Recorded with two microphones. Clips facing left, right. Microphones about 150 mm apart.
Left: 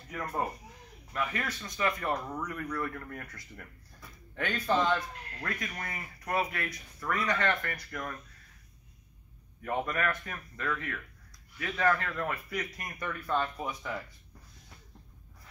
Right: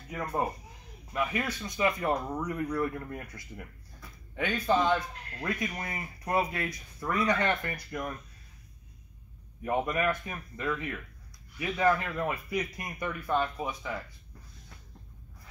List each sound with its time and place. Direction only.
0.1 s speech: 15° right (ahead or behind)
9.6 s speech: 15° right (ahead or behind)